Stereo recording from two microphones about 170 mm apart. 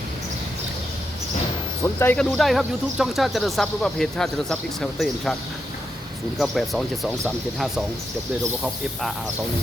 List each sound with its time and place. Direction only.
1.8 s speech: 15° left (ahead or behind)
2.1 s speech: 5° left (ahead or behind)
6.3 s speech: centre (ahead or behind)